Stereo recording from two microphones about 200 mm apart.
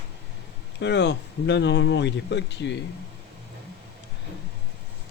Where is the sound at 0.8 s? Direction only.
60° left (ahead or behind).